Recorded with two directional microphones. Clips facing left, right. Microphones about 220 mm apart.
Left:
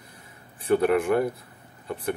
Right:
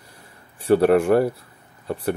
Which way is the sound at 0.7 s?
35° right (ahead or behind).